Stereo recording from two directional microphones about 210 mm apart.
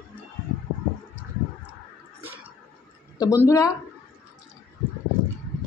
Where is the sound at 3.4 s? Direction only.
15° left (ahead or behind).